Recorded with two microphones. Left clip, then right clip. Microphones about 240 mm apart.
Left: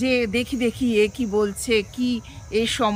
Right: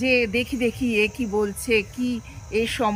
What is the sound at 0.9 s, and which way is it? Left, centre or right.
Speech, left.